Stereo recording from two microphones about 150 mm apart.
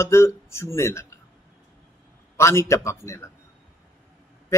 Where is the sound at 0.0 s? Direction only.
15° left (ahead or behind).